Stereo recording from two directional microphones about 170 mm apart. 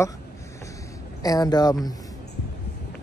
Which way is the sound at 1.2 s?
20° left (ahead or behind).